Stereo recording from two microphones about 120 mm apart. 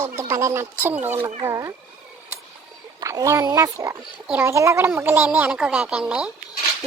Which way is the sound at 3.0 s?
25° right (ahead or behind).